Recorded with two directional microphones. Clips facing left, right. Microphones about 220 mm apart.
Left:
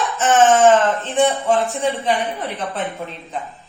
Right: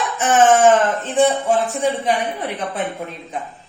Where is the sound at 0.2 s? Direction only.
15° right (ahead or behind).